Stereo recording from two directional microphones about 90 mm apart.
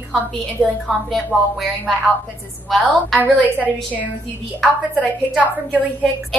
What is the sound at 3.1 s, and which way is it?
Speech, 15° left (ahead or behind).